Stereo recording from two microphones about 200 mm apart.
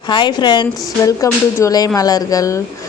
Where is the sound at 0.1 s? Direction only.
20° left (ahead or behind).